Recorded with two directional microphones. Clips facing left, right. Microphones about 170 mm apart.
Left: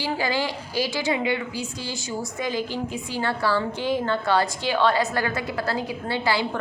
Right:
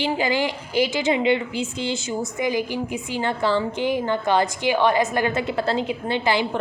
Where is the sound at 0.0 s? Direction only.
20° right (ahead or behind).